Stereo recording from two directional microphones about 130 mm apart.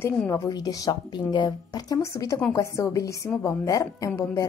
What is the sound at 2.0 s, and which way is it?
A woman's voice, 25° left (ahead or behind).